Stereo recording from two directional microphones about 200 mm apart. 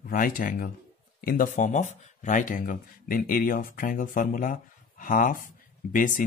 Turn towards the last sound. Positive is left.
turn(degrees=40)  # may be behind; listen again after turning